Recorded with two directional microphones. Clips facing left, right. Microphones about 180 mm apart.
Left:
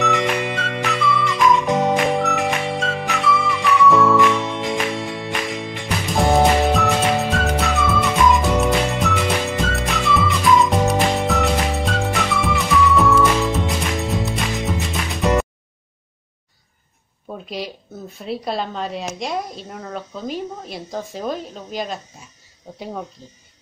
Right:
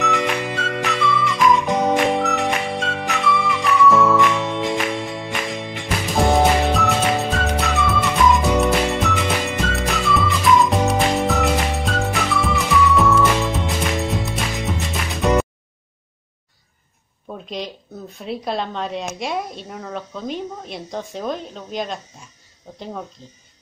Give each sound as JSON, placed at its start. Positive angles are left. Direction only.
{"t": 0.0, "sound": "music", "side_deg": 0}
{"t": 17.3, "sound": "a sound", "side_deg": 5}
{"t": 18.1, "sound": "speech", "side_deg": 0}